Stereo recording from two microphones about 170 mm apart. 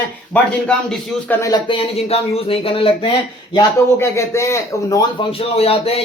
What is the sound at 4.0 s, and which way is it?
Speech, 15° left (ahead or behind).